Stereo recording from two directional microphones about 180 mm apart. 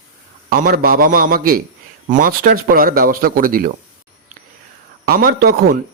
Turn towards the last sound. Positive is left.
turn(degrees=-60)  # may be behind; listen again after turning